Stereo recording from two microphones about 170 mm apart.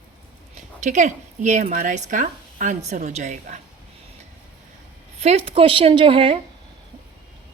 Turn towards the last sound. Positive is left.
turn(degrees=-30)  # may be behind; listen again after turning